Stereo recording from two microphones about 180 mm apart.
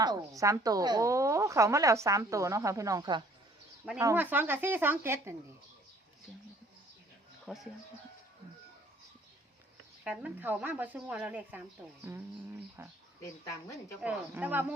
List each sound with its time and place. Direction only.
0.0 s a woman's voice: 20° right (ahead or behind)
4.0 s a woman's voice: 10° right (ahead or behind)
7.4 s speech: centre (ahead or behind)
10.0 s a woman's voice: 5° right (ahead or behind)
12.1 s a woman's voice: 20° right (ahead or behind)
13.2 s speech: 20° left (ahead or behind)
14.0 s a woman's voice: 10° right (ahead or behind)